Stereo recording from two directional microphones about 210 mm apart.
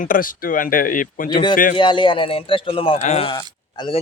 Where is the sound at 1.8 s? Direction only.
20° left (ahead or behind).